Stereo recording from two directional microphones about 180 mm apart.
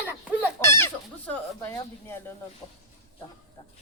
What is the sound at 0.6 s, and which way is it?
Speech, 15° left (ahead or behind).